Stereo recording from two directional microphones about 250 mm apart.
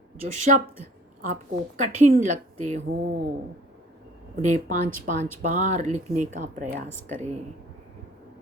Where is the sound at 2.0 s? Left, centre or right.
Right.